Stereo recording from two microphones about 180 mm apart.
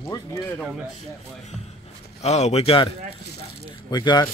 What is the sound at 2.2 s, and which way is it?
Speech, 35° left (ahead or behind).